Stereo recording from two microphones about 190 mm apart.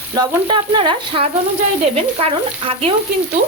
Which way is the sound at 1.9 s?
30° right (ahead or behind).